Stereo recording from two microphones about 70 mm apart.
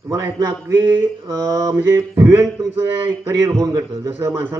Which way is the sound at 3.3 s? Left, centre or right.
Right.